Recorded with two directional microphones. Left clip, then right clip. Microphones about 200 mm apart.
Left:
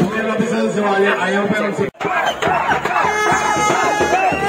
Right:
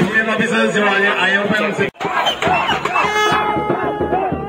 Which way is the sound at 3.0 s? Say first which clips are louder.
Right 1 dB; 40° right (ahead or behind).